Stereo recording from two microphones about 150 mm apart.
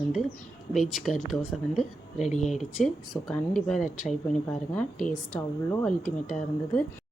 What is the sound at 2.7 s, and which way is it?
Speech, centre (ahead or behind).